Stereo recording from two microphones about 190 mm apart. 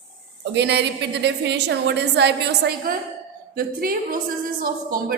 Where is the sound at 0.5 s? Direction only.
60° right (ahead or behind).